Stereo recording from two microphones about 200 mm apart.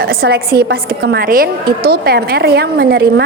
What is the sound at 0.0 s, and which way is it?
A woman's voice, 50° right (ahead or behind).